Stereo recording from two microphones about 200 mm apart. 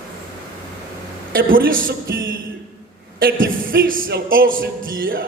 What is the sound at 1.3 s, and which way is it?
A man's voice, 45° right (ahead or behind).